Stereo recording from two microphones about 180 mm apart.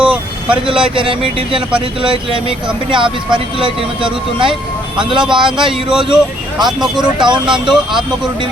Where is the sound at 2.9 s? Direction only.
30° right (ahead or behind).